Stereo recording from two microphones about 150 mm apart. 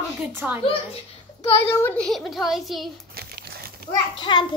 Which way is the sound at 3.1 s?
90° right.